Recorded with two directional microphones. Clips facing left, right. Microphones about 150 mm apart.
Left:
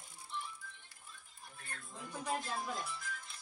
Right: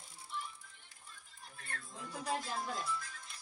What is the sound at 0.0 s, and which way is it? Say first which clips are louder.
Music: even; centre (ahead or behind).